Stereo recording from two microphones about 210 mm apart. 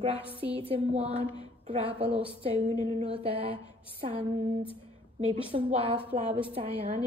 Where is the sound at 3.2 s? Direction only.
25° right (ahead or behind).